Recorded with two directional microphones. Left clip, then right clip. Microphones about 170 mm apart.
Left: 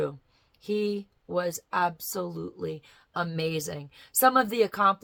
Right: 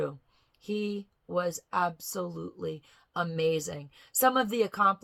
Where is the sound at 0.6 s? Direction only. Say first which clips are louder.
Left 5 dB; 15° left (ahead or behind).